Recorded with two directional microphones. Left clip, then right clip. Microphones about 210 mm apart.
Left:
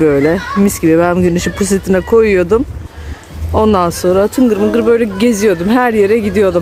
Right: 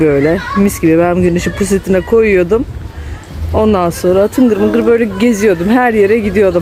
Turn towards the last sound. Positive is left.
turn(degrees=10)  # may be behind; listen again after turning